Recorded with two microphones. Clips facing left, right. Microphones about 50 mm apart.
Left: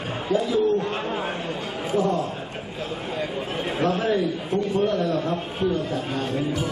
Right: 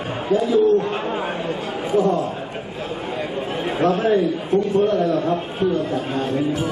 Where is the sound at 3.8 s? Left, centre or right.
Centre.